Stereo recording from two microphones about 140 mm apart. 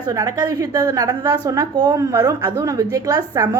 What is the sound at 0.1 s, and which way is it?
A woman's voice, 25° right (ahead or behind).